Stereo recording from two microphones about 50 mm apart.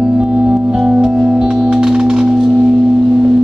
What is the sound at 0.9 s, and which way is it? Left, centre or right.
Music, right.